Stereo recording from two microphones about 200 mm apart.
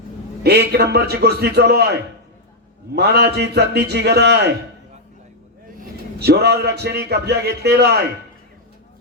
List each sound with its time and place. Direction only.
0.4 s a man's voice: 55° right (ahead or behind)
5.8 s speech: 55° right (ahead or behind)